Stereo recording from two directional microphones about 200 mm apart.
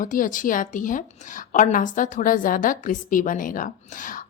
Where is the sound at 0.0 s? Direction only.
40° left (ahead or behind).